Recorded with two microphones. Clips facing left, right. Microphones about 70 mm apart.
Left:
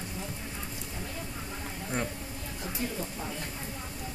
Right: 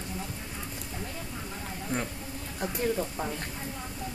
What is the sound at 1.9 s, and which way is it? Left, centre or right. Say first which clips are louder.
Speech: right 1 dB; centre.